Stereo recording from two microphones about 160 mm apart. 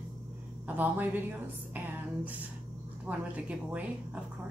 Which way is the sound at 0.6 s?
10° right (ahead or behind).